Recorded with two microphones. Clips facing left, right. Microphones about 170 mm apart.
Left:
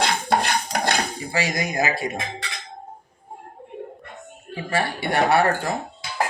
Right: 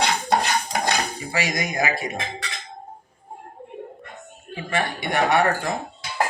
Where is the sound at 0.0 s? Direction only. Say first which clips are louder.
Even; 55° left (ahead or behind).